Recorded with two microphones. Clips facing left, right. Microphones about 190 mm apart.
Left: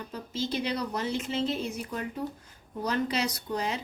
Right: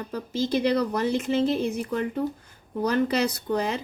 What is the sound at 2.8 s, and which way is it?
Speech, 60° right (ahead or behind).